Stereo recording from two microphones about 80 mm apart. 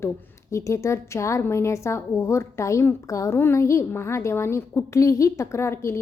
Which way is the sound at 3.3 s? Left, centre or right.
Left.